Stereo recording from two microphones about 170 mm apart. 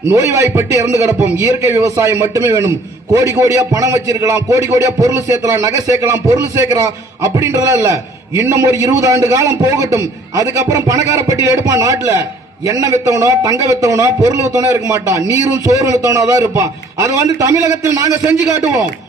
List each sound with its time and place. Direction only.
0.1 s a man's voice: 20° right (ahead or behind)